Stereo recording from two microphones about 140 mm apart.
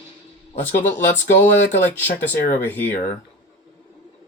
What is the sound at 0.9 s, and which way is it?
Speech, 15° left (ahead or behind).